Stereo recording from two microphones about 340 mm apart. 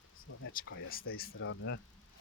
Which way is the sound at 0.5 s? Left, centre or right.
Left.